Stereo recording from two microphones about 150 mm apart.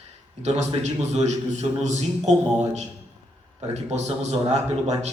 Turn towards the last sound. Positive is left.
turn(degrees=-45)  # may be behind; listen again after turning